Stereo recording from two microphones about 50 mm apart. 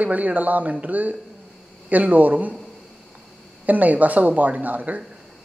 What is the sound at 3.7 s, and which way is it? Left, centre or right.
Speech, right.